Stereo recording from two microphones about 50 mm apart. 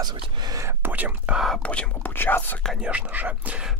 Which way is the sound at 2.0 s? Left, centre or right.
Left.